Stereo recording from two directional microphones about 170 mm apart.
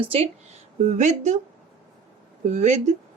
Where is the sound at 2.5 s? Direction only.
45° right (ahead or behind).